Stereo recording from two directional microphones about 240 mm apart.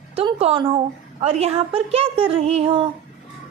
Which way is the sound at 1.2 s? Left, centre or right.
Right.